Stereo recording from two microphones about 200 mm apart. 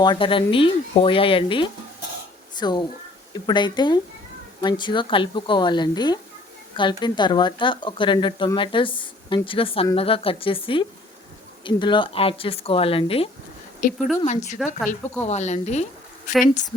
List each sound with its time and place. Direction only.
0.0 s speech: 25° left (ahead or behind)
13.8 s a woman's voice: 40° left (ahead or behind)